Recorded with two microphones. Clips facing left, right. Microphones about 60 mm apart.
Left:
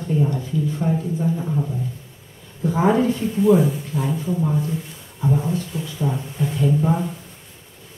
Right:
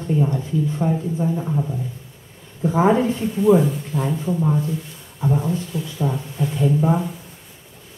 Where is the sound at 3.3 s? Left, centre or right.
Centre.